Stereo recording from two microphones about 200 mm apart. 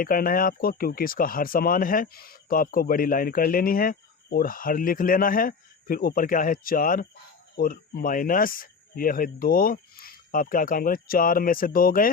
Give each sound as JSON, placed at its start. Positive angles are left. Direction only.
{"t": 0.0, "sound": "speech", "side_deg": 45}